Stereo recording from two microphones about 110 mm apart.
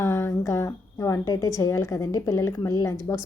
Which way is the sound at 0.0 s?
20° left (ahead or behind).